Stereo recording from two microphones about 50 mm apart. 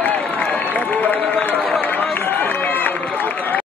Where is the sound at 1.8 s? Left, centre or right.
Left.